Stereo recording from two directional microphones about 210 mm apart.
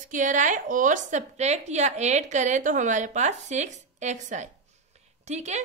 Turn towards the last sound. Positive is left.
turn(degrees=-35)  # may be behind; listen again after turning